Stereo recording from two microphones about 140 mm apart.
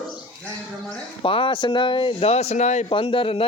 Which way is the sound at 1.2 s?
40° left (ahead or behind).